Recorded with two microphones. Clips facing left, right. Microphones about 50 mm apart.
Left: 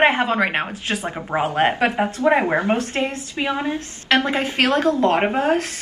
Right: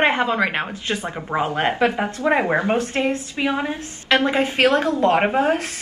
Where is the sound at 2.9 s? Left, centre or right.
Centre.